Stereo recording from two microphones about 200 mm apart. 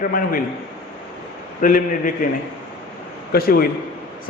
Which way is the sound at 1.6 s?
45° left (ahead or behind).